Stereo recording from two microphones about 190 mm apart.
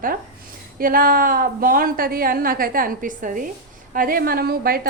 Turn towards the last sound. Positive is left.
turn(degrees=-55)  # may be behind; listen again after turning